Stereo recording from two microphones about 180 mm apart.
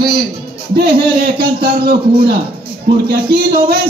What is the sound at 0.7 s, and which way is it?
A man's voice, 60° right (ahead or behind).